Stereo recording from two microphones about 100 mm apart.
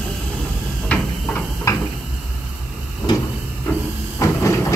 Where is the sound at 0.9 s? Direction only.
25° left (ahead or behind).